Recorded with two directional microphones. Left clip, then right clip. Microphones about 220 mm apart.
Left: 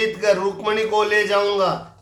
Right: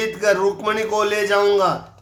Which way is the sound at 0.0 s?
20° right (ahead or behind).